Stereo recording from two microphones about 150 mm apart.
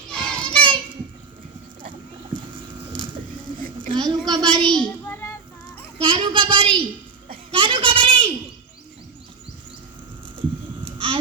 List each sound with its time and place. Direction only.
0.1 s child singing: 5° left (ahead or behind)
2.8 s music: 35° right (ahead or behind)
3.8 s child singing: 30° right (ahead or behind)
4.6 s child singing: 5° left (ahead or behind)
6.0 s a child's voice: 35° right (ahead or behind)
7.5 s a sound: 35° right (ahead or behind)
10.8 s babbling: 35° right (ahead or behind)